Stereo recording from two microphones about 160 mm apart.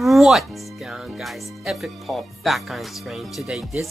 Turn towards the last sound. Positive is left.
turn(degrees=0)  # may be behind; listen again after turning